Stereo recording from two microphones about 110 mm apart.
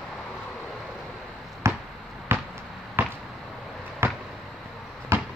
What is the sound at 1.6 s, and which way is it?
Basketball bounce, 25° right (ahead or behind).